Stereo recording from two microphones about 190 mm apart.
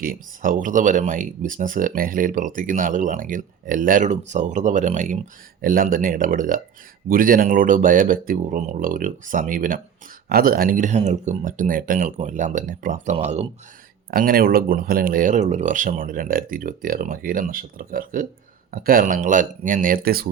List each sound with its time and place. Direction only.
0.0 s speech: 50° right (ahead or behind)
13.1 s speech: 35° right (ahead or behind)
14.1 s speech: 50° right (ahead or behind)